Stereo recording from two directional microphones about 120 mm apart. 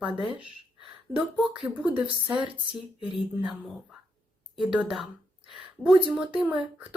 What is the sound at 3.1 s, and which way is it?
Speech, centre (ahead or behind).